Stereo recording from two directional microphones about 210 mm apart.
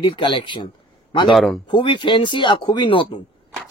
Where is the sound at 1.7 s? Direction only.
20° left (ahead or behind).